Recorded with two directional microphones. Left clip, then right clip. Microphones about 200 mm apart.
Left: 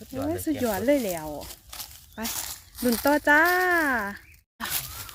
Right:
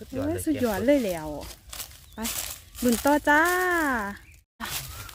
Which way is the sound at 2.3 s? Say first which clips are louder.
Even; 25° right (ahead or behind).